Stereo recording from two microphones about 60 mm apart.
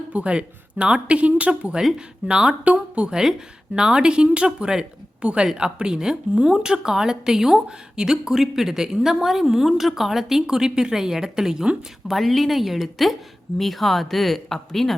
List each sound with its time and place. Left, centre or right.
0.1 s speech: right
1.8 s speech: centre
2.7 s a sound: right
3.8 s speech: centre
12.0 s speech: centre